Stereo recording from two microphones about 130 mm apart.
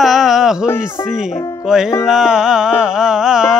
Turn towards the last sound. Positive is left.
turn(degrees=-5)  # may be behind; listen again after turning